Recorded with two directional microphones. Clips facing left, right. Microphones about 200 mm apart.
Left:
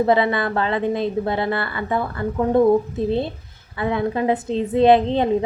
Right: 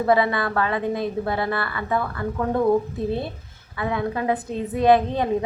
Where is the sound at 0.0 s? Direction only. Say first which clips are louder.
Left 2 dB; 25° left (ahead or behind).